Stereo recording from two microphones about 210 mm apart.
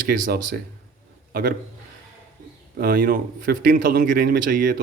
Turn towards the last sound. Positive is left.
turn(degrees=-40)  # may be behind; listen again after turning